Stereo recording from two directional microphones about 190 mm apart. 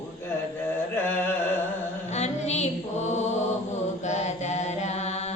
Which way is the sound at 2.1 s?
35° left (ahead or behind).